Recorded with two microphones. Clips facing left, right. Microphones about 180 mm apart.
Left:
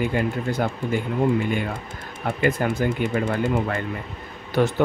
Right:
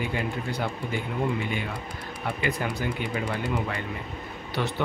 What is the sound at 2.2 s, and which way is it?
Speech, 45° left (ahead or behind).